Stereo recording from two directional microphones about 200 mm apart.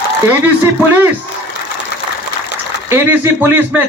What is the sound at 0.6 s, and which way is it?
Speech, 10° right (ahead or behind).